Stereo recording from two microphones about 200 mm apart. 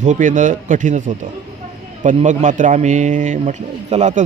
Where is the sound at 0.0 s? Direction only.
40° right (ahead or behind).